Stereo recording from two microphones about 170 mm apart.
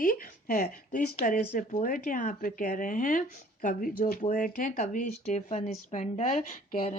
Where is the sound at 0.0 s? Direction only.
60° left (ahead or behind).